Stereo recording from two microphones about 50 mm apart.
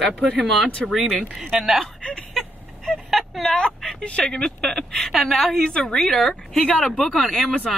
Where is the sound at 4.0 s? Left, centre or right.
Left.